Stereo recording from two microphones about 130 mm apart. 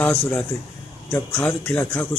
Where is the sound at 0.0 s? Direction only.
10° left (ahead or behind).